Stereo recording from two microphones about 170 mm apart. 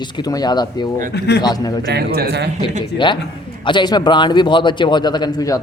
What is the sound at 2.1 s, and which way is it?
Speech, 75° right (ahead or behind).